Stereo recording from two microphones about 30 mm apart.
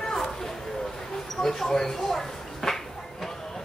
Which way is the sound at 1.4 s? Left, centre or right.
Centre.